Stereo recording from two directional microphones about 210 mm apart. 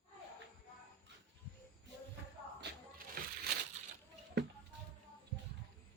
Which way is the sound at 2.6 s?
40° right (ahead or behind).